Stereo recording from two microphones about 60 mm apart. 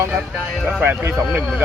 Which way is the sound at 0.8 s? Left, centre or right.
Right.